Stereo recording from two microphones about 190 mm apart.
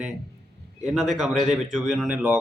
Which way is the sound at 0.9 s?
Centre (ahead or behind).